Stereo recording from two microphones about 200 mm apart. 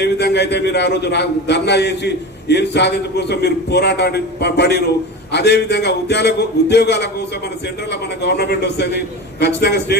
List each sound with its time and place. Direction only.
0.0 s a man's voice: 55° left (ahead or behind)